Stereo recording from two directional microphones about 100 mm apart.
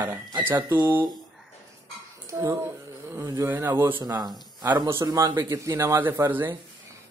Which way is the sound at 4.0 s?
40° right (ahead or behind).